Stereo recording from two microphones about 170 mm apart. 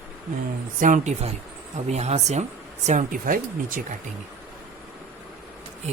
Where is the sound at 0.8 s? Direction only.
45° right (ahead or behind).